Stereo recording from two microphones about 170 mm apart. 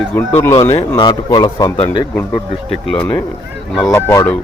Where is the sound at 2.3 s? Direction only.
5° left (ahead or behind).